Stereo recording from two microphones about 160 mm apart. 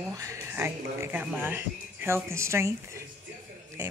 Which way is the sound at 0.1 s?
20° right (ahead or behind).